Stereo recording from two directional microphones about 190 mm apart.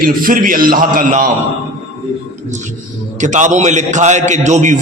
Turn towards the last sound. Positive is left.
turn(degrees=-40)  # may be behind; listen again after turning